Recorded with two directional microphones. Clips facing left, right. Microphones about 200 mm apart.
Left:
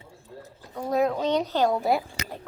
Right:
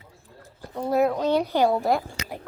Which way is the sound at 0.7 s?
5° right (ahead or behind).